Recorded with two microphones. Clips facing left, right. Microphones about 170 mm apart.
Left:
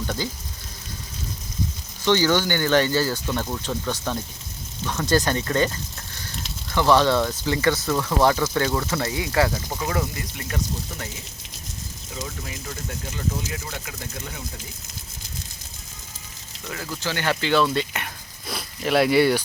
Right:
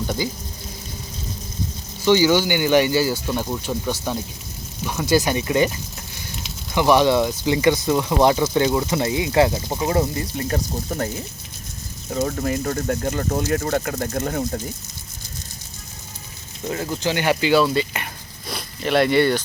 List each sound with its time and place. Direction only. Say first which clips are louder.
2.0 s speech: right 4 dB; 10° right (ahead or behind); by 11.1 s 45° right (ahead or behind)
12.1 s speech: right 13 dB; 50° right (ahead or behind)
16.6 s speech: right 7 dB; 30° right (ahead or behind); by 19.4 s 5° left (ahead or behind)